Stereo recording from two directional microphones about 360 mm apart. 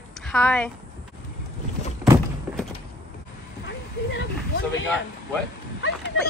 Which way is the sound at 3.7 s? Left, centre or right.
Left.